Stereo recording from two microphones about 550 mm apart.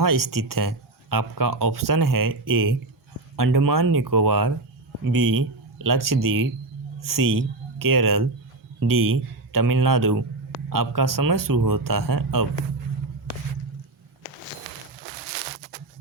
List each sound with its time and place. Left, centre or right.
0.0 s speech: right